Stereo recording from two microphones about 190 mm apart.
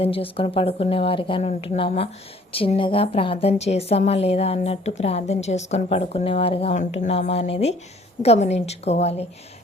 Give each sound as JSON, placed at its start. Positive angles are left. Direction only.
{"t": 0.0, "sound": "a woman's voice", "side_deg": 30}